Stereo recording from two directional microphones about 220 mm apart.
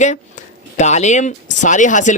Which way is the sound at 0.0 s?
30° left (ahead or behind).